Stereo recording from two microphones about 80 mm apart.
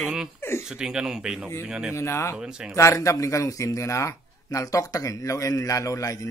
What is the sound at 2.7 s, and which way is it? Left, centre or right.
Speech, left.